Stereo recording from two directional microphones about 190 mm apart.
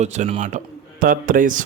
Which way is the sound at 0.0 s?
35° right (ahead or behind).